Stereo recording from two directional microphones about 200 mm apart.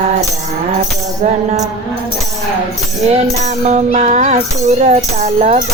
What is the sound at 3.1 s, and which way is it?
Music, 35° right (ahead or behind).